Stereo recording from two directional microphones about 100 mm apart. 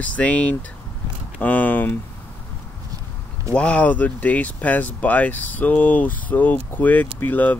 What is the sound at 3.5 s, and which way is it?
Speech, 10° left (ahead or behind).